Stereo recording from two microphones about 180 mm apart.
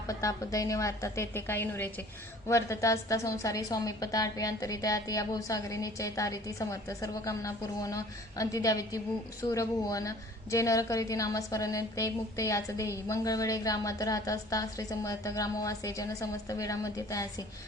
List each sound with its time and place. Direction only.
0.1 s a woman's voice: 20° left (ahead or behind)